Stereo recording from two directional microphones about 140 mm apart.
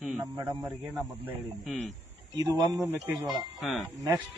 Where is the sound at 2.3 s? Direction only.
30° right (ahead or behind).